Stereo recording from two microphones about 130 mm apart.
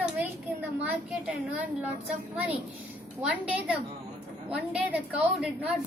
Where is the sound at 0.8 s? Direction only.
10° right (ahead or behind).